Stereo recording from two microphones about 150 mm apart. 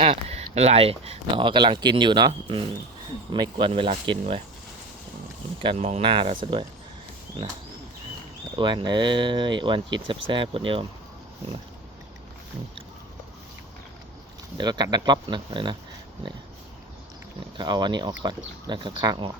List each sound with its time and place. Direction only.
0.0 s speech: 40° right (ahead or behind)
5.6 s speech: 45° right (ahead or behind)
8.5 s speech: 30° right (ahead or behind)
14.6 s speech: 30° right (ahead or behind)
17.6 s speech: 30° right (ahead or behind)